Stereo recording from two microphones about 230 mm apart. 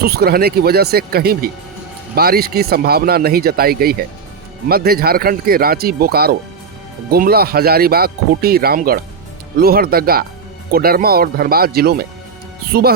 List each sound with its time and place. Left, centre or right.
0.0 s speech: right